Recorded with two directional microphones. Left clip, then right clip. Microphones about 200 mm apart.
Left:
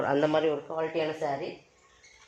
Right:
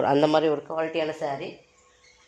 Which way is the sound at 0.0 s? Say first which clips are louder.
Right 5 dB; 40° right (ahead or behind).